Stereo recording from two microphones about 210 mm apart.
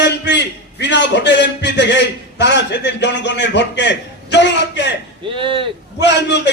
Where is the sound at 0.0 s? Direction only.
55° left (ahead or behind).